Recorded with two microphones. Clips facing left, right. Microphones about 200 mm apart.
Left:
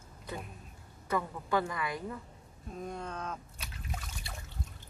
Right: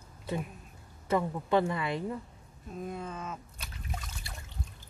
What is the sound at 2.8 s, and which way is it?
Speech, 5° right (ahead or behind).